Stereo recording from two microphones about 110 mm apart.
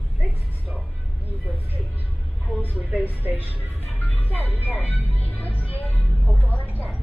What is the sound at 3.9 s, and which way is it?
Music, 15° left (ahead or behind).